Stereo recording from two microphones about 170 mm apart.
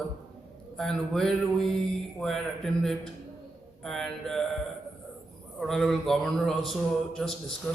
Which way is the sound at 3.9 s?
Centre (ahead or behind).